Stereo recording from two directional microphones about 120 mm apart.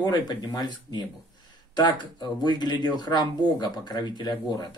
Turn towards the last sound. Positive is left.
turn(degrees=35)  # may be behind; listen again after turning